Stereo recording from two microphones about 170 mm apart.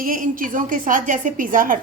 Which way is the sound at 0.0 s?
55° right (ahead or behind).